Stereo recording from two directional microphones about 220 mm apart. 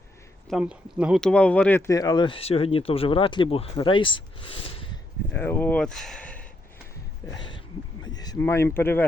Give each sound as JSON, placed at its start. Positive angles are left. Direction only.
{"t": 0.4, "sound": "speech", "side_deg": -5}
{"t": 5.3, "sound": "speech", "side_deg": 10}
{"t": 8.0, "sound": "speech", "side_deg": 15}